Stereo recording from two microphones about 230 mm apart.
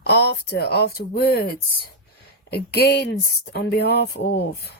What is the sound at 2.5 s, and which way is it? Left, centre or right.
Speech, left.